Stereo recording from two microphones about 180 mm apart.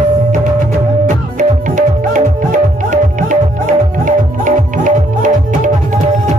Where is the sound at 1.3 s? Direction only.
45° right (ahead or behind).